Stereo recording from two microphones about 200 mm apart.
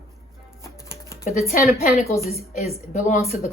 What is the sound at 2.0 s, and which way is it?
Speech, 15° left (ahead or behind).